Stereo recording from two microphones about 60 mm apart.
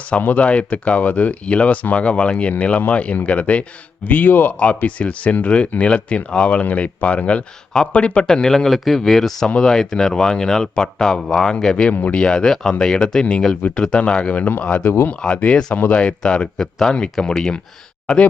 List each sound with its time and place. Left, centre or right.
0.2 s speech: left
11.9 s speech: left
12.2 s speech: centre
13.6 s speech: left
14.8 s speech: left
15.4 s speech: left